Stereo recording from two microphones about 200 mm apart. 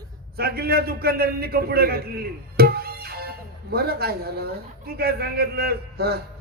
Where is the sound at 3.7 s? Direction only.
50° right (ahead or behind).